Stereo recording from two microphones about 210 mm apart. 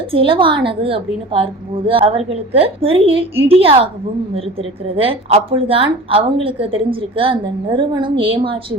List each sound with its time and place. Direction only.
0.1 s a woman's voice: 25° right (ahead or behind)
4.9 s a woman's voice: 25° right (ahead or behind)